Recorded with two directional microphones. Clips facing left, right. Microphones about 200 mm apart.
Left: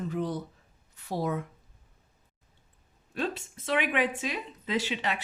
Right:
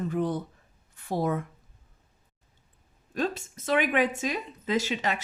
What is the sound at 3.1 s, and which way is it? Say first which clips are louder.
Speech: right 3 dB; 40° right (ahead or behind).